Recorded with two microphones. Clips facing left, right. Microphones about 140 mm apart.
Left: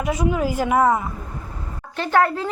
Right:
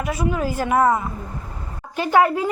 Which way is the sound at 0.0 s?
20° left (ahead or behind).